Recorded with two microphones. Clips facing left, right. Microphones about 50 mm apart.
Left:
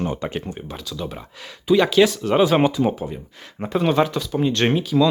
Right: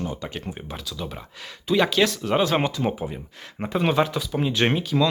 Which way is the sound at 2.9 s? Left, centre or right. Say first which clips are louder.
Left 2 dB; centre.